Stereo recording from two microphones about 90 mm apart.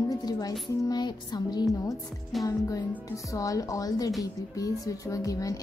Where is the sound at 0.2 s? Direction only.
45° left (ahead or behind).